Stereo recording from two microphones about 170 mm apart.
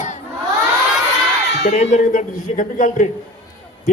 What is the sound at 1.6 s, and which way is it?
A man's voice, 40° left (ahead or behind).